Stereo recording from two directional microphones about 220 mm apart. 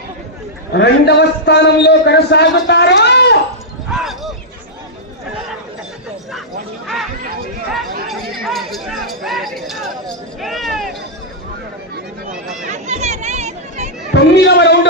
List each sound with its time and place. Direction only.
0.7 s a man's voice: 50° left (ahead or behind)
3.9 s a sound: centre (ahead or behind)
6.8 s a sound: centre (ahead or behind)
8.0 s chatter: centre (ahead or behind)
8.4 s speech: centre (ahead or behind)
12.7 s chatter: 30° right (ahead or behind)
14.1 s a man's voice: 50° left (ahead or behind)